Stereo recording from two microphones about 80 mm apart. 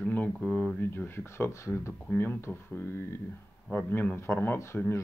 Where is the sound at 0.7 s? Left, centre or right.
Left.